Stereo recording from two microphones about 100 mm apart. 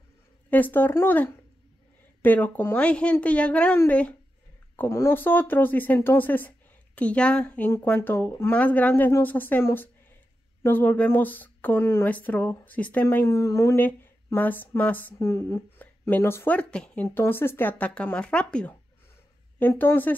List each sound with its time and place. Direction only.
0.5 s a woman's voice: 20° left (ahead or behind)
15.1 s speech: 25° left (ahead or behind)
16.5 s a woman's voice: 10° left (ahead or behind)
19.6 s speech: 20° left (ahead or behind)